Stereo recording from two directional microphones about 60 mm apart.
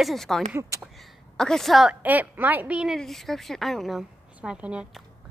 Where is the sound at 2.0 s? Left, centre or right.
Right.